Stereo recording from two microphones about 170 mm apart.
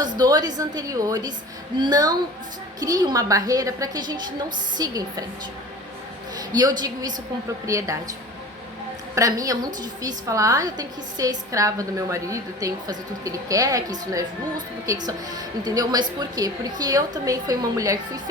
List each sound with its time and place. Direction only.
0.2 s a woman's voice: 25° right (ahead or behind)
6.5 s a woman's voice: 25° right (ahead or behind)
9.1 s a woman's voice: 20° right (ahead or behind)